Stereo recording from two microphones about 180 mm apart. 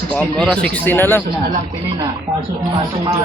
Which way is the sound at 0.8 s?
10° left (ahead or behind).